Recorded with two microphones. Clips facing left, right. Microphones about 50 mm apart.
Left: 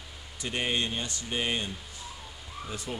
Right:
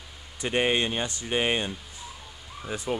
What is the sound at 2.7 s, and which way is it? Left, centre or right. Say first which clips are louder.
Speech: right 8 dB; centre.